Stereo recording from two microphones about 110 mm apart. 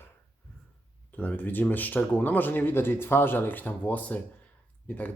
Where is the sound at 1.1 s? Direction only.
15° left (ahead or behind).